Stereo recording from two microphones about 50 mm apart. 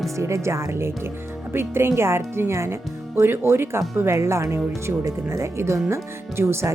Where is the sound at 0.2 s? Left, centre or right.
Right.